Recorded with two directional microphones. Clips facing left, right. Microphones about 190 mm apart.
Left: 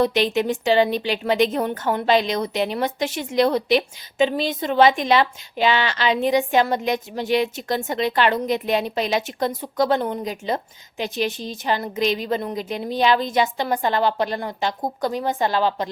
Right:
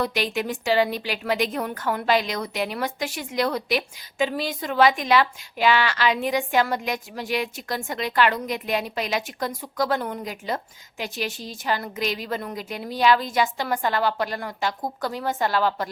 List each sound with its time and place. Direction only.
0.0 s a woman's voice: 25° left (ahead or behind)